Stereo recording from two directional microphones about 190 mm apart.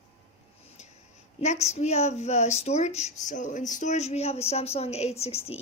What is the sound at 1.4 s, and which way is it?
Speech, 35° left (ahead or behind).